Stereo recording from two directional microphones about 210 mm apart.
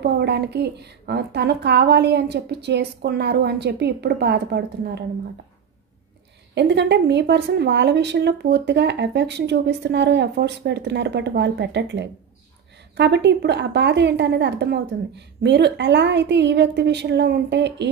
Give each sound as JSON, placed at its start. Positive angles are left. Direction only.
{"t": 0.0, "sound": "a woman's voice", "side_deg": -50}
{"t": 6.5, "sound": "speech", "side_deg": -55}